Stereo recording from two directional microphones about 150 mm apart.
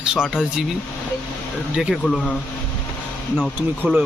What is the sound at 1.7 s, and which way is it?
Speech, 5° right (ahead or behind).